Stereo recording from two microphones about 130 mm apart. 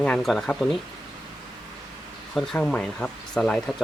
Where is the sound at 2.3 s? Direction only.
5° left (ahead or behind).